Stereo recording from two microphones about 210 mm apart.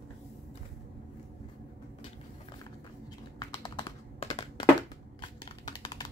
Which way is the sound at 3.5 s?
20° left (ahead or behind).